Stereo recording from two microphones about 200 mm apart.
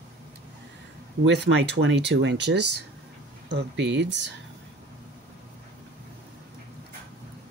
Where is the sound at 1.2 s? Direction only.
60° right (ahead or behind).